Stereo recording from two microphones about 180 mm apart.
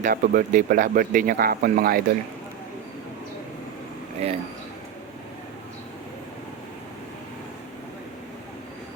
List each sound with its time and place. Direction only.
0.0 s speech: 50° right (ahead or behind)
4.2 s speech: 35° right (ahead or behind)